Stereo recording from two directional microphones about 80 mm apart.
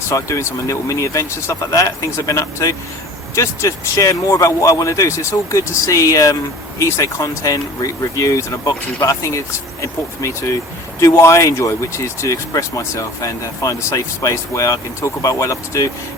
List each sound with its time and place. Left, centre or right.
0.1 s speech: left